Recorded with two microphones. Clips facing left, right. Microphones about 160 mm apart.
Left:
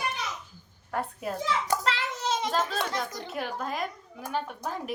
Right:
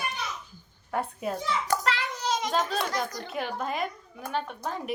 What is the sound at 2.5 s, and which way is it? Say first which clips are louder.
A woman's voice: right 1 dB; centre (ahead or behind).